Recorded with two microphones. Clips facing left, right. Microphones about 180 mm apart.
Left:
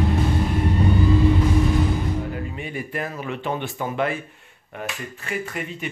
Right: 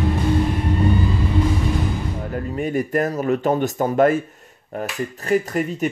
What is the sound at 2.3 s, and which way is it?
Speech, 45° right (ahead or behind).